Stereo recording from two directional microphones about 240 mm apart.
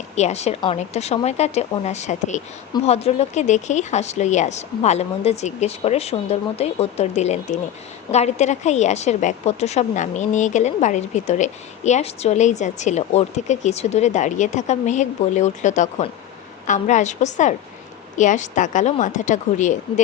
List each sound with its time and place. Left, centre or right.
0.2 s a woman's voice: left